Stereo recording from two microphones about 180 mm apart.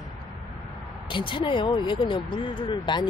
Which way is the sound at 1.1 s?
25° left (ahead or behind).